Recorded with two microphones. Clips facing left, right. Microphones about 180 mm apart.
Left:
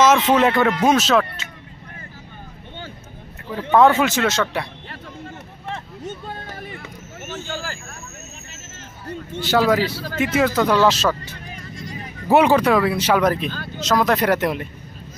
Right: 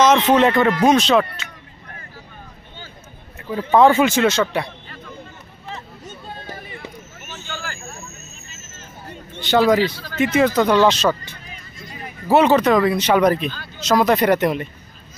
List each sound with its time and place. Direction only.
0.0 s speech: 5° left (ahead or behind)
3.7 s speech: centre (ahead or behind)
5.7 s a sound: 65° left (ahead or behind)
7.2 s vehicle: 45° left (ahead or behind)
8.5 s hubbub: 65° left (ahead or behind)
9.4 s speech: 5° left (ahead or behind)